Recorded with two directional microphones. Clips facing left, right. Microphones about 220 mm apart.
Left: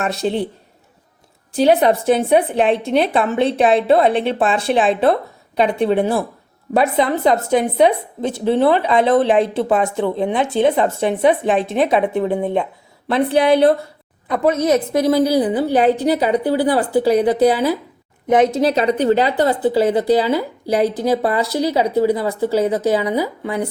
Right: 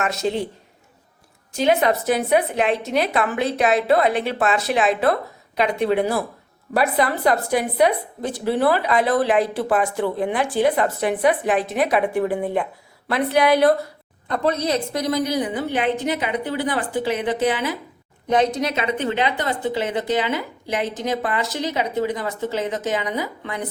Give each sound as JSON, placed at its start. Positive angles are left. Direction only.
{"t": 0.0, "sound": "speech", "side_deg": 30}
{"t": 1.5, "sound": "a woman's voice", "side_deg": 35}
{"t": 18.3, "sound": "speech", "side_deg": 20}